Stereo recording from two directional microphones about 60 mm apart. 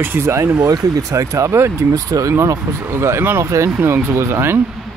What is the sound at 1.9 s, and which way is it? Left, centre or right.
Speech, right.